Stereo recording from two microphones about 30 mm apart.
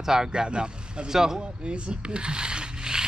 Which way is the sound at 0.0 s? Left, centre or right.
Centre.